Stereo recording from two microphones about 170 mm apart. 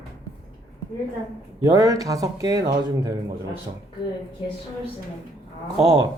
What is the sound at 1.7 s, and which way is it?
Speech, 20° right (ahead or behind).